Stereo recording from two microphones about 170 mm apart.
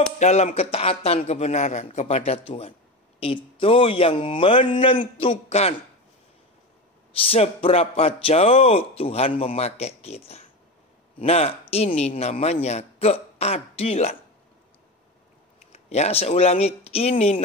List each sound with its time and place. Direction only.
0.2 s speech: 40° left (ahead or behind)
7.2 s speech: 35° left (ahead or behind)
15.7 s speech: 40° left (ahead or behind)